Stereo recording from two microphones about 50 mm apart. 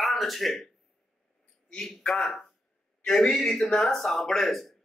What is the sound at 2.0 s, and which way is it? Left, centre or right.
Speech, left.